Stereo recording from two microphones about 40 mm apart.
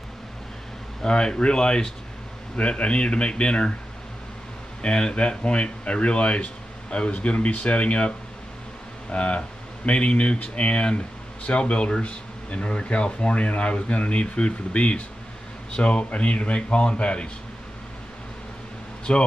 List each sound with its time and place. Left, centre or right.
1.0 s speech: left
4.8 s speech: left
9.1 s speech: left
19.1 s speech: left